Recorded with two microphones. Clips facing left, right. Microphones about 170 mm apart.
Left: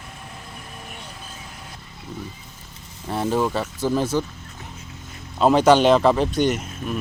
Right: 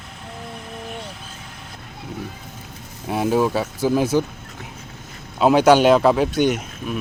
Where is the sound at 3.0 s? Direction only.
10° right (ahead or behind).